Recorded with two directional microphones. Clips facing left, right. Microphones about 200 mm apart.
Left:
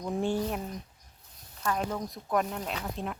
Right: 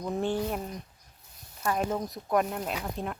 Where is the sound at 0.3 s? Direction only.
5° right (ahead or behind).